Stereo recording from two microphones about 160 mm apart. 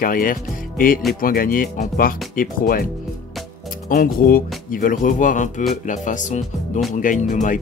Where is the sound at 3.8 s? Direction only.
60° left (ahead or behind).